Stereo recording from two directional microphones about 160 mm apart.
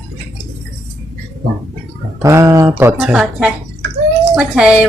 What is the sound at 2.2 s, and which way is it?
Speech, 20° right (ahead or behind).